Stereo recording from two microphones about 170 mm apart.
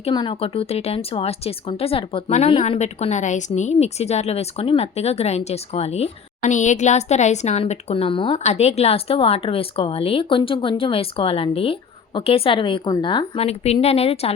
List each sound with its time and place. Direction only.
0.0 s speech: 30° left (ahead or behind)